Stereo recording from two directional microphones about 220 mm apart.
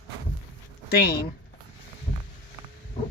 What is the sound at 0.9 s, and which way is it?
Speech, 45° left (ahead or behind).